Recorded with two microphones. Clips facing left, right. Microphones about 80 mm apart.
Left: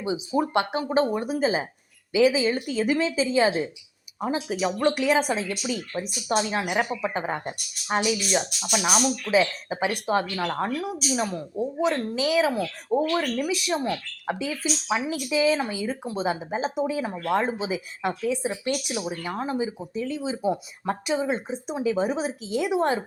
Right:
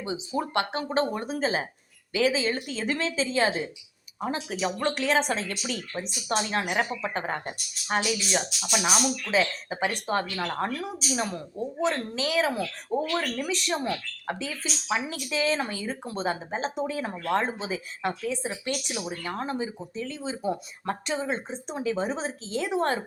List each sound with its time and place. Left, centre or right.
0.0 s speech: centre
9.2 s speech: centre